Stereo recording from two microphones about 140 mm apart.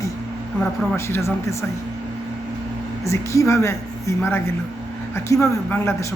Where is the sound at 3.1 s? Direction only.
20° left (ahead or behind).